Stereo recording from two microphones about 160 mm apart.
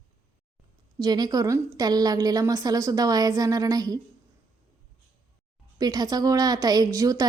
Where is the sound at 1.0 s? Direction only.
25° right (ahead or behind).